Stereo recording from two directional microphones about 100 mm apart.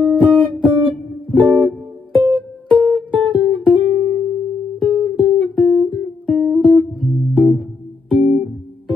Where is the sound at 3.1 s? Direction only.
55° right (ahead or behind).